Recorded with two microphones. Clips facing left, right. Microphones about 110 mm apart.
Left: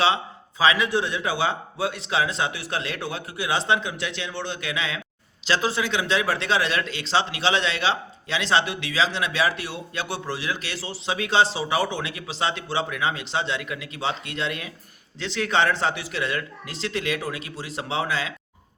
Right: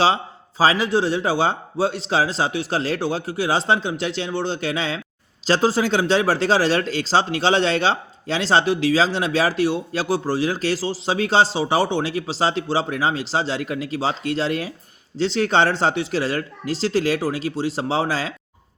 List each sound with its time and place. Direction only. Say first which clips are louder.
0.6 s speech: right 3 dB; 35° right (ahead or behind)